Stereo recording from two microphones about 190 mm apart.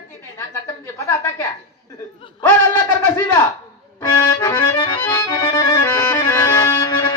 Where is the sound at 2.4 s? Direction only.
10° left (ahead or behind).